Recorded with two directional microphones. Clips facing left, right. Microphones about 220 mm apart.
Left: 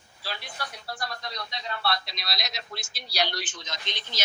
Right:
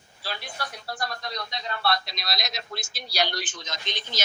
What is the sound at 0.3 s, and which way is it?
Speech, 45° right (ahead or behind).